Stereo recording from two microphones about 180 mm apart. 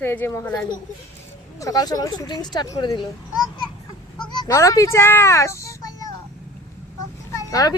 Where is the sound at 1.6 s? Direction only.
20° left (ahead or behind).